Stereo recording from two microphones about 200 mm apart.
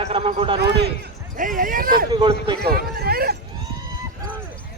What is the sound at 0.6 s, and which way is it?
Speech, 55° right (ahead or behind).